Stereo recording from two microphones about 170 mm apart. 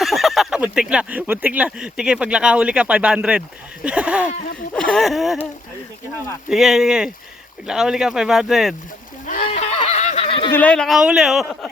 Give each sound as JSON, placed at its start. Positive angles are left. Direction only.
{"t": 0.0, "sound": "speech", "side_deg": 0}
{"t": 4.7, "sound": "speech", "side_deg": 5}
{"t": 6.5, "sound": "speech", "side_deg": 0}
{"t": 9.2, "sound": "a sound", "side_deg": 55}
{"t": 9.6, "sound": "a sound", "side_deg": 35}
{"t": 10.5, "sound": "speech", "side_deg": 10}